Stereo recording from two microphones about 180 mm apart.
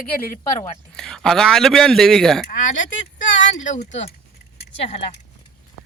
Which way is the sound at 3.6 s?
45° left (ahead or behind).